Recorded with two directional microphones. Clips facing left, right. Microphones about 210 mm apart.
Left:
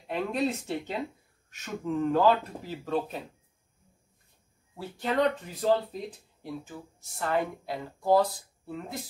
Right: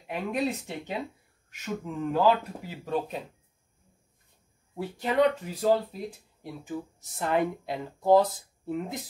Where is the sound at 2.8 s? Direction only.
15° right (ahead or behind).